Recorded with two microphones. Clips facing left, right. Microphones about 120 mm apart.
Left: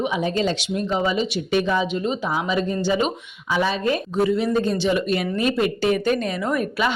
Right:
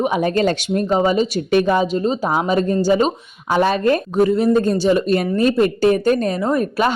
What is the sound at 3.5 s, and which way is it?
Speech, 50° right (ahead or behind).